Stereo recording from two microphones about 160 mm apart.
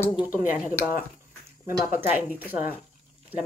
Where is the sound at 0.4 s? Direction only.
10° right (ahead or behind).